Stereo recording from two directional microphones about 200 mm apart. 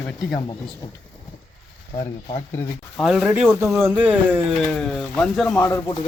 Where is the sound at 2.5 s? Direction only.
10° left (ahead or behind).